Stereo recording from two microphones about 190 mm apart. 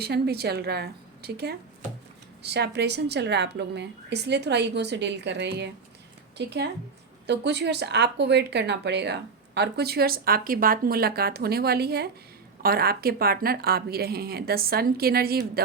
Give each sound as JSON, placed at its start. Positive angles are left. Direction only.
{"t": 0.0, "sound": "speech", "side_deg": -55}